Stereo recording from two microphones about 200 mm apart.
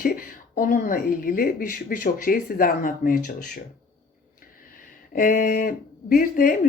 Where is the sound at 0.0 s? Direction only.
45° left (ahead or behind).